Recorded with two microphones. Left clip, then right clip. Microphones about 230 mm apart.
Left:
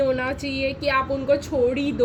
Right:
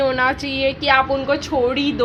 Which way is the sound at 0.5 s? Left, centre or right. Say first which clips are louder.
Right 6 dB; right.